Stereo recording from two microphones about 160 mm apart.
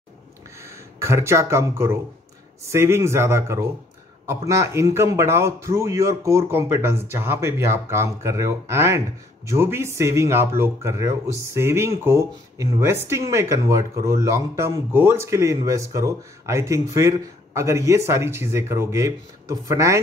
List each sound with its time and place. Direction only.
0.9 s speech: 15° right (ahead or behind)